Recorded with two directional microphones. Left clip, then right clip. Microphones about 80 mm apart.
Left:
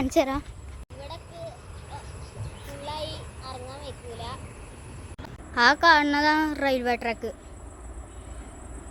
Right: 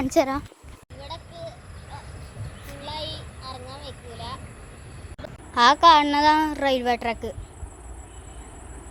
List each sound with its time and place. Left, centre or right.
0.2 s speech: right
0.9 s a sound: centre
2.8 s child singing: centre
5.5 s a woman's voice: centre
7.1 s a woman's voice: centre